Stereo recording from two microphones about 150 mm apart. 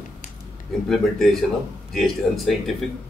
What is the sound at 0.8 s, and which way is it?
A man's voice, centre (ahead or behind).